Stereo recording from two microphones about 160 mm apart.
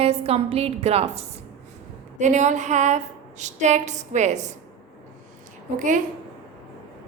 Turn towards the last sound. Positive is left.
turn(degrees=-55)  # may be behind; listen again after turning